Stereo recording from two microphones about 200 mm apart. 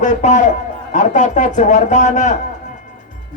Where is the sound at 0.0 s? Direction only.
35° left (ahead or behind).